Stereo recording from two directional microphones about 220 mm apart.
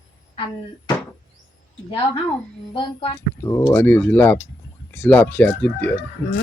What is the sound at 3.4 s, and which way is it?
Speech, 10° left (ahead or behind).